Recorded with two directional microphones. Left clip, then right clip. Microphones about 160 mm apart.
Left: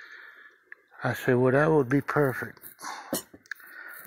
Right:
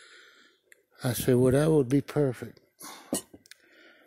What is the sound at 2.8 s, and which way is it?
Cough, 75° right (ahead or behind).